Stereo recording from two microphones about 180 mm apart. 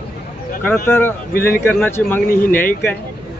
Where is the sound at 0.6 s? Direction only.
10° left (ahead or behind).